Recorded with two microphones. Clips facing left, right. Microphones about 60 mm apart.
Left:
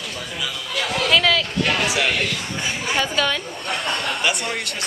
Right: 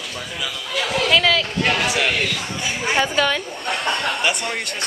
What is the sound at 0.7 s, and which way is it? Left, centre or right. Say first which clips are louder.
Speech: right 1 dB; centre.